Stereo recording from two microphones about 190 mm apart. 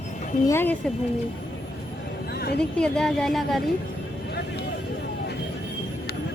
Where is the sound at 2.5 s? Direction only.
5° left (ahead or behind).